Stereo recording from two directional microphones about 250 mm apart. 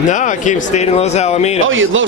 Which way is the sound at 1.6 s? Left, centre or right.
Right.